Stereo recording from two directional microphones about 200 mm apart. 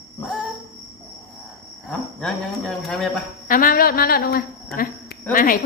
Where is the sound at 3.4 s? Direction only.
45° left (ahead or behind).